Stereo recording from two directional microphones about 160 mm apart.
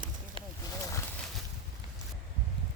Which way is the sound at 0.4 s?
35° right (ahead or behind).